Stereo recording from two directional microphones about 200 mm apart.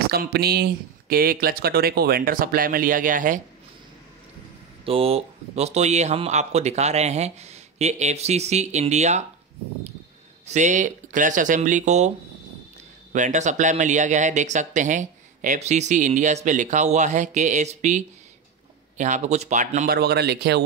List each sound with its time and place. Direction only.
0.1 s speech: 50° right (ahead or behind)
4.8 s speech: 30° right (ahead or behind)
10.4 s speech: 35° right (ahead or behind)
13.1 s speech: 35° right (ahead or behind)
19.9 s speech: 55° right (ahead or behind)